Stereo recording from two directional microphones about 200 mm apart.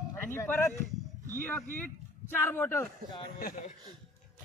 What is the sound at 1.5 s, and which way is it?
Speech, 10° left (ahead or behind).